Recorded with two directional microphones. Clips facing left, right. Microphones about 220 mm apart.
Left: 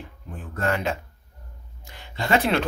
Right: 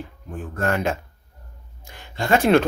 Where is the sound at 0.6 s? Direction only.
45° right (ahead or behind).